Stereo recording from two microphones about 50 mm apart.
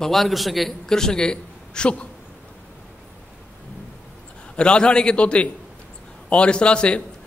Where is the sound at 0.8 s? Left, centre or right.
Centre.